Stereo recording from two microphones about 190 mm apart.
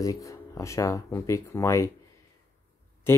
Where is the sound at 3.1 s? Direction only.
15° left (ahead or behind).